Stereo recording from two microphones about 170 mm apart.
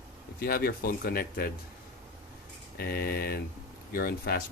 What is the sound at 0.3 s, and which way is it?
Speech, 60° left (ahead or behind).